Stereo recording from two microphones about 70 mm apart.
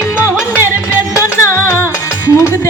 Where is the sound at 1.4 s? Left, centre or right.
Left.